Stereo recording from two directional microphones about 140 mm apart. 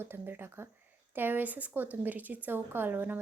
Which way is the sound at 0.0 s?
15° right (ahead or behind).